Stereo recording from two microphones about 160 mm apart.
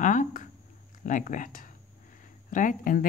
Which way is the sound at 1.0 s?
55° left (ahead or behind).